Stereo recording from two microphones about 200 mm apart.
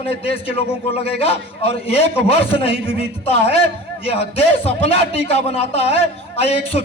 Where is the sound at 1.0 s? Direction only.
30° left (ahead or behind).